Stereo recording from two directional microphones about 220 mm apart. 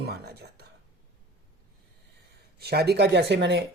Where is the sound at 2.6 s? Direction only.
45° right (ahead or behind).